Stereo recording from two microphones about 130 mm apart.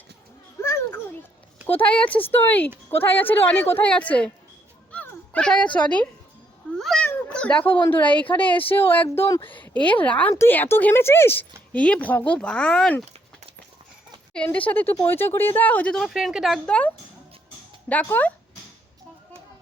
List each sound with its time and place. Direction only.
0.6 s children playing: 20° left (ahead or behind)
1.6 s a woman's voice: 15° left (ahead or behind)
4.9 s a sound: 10° left (ahead or behind)
5.7 s a woman's voice: 10° left (ahead or behind)
6.7 s cat: 5° left (ahead or behind)
7.3 s a woman's voice: 10° left (ahead or behind)
14.3 s a woman's voice: 10° left (ahead or behind)
18.0 s a woman's voice: 15° left (ahead or behind)